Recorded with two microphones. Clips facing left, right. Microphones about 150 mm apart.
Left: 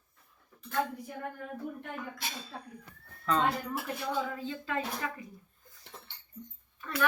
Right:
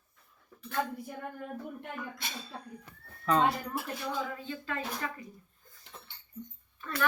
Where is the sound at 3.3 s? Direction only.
15° right (ahead or behind).